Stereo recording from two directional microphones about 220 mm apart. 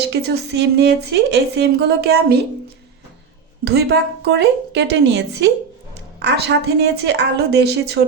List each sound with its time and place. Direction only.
0.0 s a woman's voice: 50° right (ahead or behind)
3.6 s a woman's voice: 50° right (ahead or behind)